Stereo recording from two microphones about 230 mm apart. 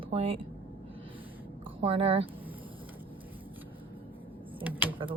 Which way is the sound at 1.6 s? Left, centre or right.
Right.